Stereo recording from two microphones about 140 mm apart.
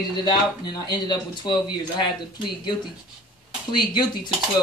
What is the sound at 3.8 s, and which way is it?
Speech, 30° left (ahead or behind).